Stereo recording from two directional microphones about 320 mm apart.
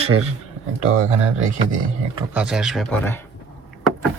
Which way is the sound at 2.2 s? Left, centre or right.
Centre.